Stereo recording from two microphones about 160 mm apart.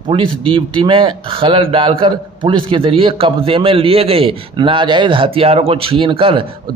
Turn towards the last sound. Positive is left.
turn(degrees=-35)  # may be behind; listen again after turning